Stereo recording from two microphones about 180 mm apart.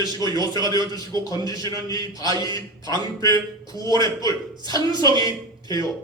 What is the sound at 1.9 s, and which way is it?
Speech, 20° left (ahead or behind).